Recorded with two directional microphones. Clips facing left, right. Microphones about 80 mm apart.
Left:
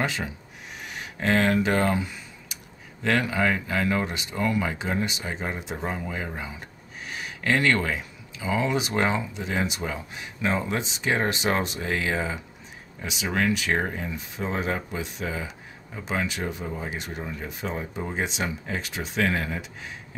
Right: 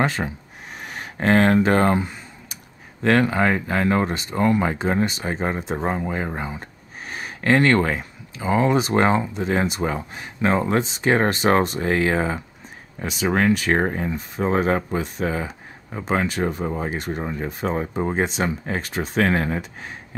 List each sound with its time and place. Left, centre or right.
0.0 s speech: right